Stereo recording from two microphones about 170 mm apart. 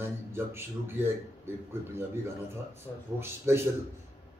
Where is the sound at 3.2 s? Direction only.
15° right (ahead or behind).